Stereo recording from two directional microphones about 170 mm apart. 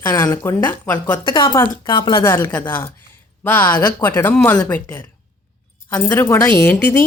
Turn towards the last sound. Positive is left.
turn(degrees=10)  # may be behind; listen again after turning